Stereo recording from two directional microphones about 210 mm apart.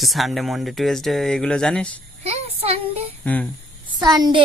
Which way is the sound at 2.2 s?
30° right (ahead or behind).